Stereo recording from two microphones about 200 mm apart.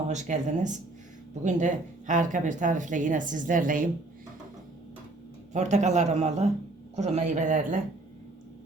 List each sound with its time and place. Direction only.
0.1 s a woman's voice: 35° right (ahead or behind)
5.5 s a woman's voice: 35° right (ahead or behind)